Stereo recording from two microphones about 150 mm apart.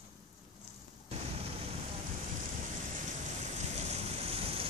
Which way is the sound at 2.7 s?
55° right (ahead or behind).